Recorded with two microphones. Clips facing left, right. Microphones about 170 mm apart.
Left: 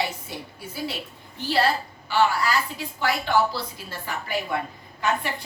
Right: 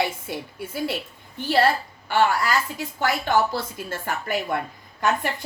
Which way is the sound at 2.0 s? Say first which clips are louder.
Right 1 dB; 50° right (ahead or behind).